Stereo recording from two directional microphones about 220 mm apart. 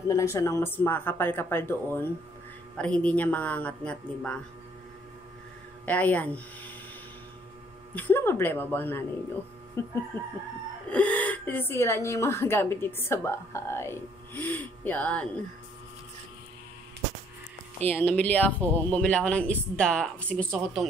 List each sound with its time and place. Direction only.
0.1 s a woman's voice: 15° left (ahead or behind)
5.9 s a woman's voice: 5° left (ahead or behind)
7.9 s a woman's voice: 10° left (ahead or behind)
17.8 s speech: 10° left (ahead or behind)